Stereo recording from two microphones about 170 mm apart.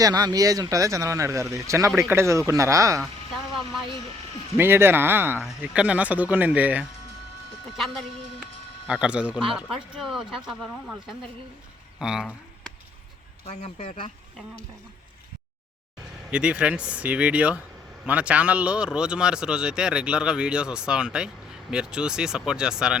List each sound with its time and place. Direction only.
0.0 s speech: 20° right (ahead or behind)
4.5 s speech: 15° right (ahead or behind)
8.9 s speech: 5° right (ahead or behind)
11.9 s a sound: 5° right (ahead or behind)
13.5 s speech: 40° left (ahead or behind)
16.3 s speech: 5° right (ahead or behind)